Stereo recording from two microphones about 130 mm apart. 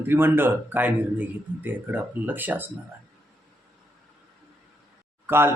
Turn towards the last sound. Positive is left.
turn(degrees=-15)  # may be behind; listen again after turning